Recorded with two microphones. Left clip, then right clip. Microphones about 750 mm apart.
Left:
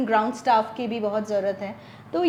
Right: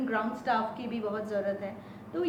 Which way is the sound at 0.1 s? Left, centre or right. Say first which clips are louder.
Left 10 dB; left.